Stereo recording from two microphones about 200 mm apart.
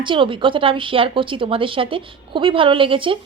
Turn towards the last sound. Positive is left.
turn(degrees=-25)  # may be behind; listen again after turning